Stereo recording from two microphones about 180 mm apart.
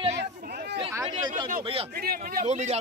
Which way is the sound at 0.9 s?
25° right (ahead or behind).